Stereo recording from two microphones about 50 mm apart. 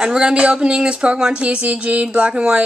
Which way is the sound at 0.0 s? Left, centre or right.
Centre.